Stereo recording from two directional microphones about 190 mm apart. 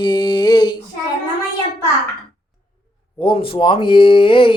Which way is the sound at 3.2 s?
30° left (ahead or behind).